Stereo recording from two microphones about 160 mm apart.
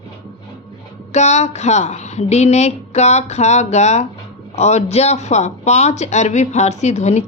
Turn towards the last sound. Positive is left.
turn(degrees=45)  # may be behind; listen again after turning